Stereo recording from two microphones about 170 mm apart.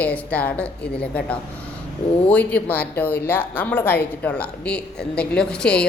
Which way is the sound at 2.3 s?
10° left (ahead or behind).